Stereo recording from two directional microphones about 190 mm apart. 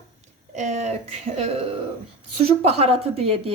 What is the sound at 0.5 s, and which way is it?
Speech, 35° right (ahead or behind).